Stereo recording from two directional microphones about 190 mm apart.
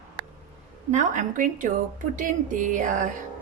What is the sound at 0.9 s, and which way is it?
A woman's voice, 40° right (ahead or behind).